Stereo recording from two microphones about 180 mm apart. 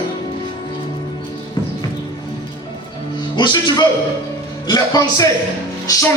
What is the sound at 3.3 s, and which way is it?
Speech, 25° left (ahead or behind).